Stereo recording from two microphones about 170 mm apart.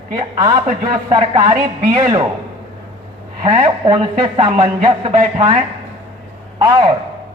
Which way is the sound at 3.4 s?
35° right (ahead or behind).